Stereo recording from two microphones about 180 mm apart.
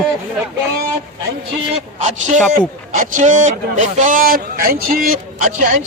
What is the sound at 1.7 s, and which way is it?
A man's voice, 40° right (ahead or behind).